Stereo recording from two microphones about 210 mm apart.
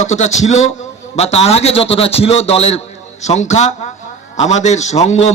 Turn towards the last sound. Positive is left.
turn(degrees=30)  # may be behind; listen again after turning